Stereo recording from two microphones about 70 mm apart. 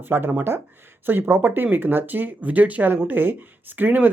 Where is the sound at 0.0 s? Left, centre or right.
Right.